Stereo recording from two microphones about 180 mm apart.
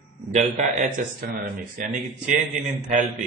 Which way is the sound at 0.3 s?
45° right (ahead or behind).